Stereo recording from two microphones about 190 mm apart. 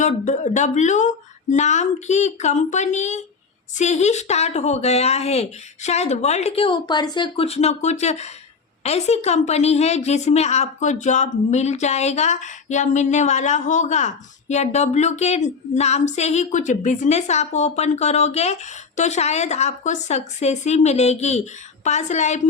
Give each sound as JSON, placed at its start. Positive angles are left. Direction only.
{"t": 0.0, "sound": "a woman's voice", "side_deg": 40}